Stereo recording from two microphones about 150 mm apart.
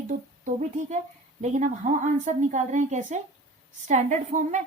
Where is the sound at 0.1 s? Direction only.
55° right (ahead or behind).